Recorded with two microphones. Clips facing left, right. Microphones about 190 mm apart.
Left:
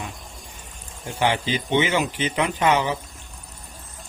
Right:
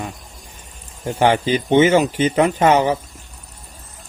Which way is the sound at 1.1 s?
45° right (ahead or behind).